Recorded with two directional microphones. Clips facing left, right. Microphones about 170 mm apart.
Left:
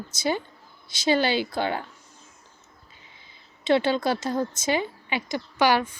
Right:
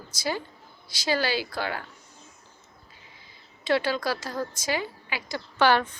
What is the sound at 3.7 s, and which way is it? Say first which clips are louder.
A woman's voice: left 4 dB; 25° left (ahead or behind).